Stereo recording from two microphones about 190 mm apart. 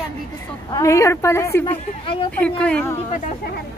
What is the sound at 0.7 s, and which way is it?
A woman's voice, 15° left (ahead or behind).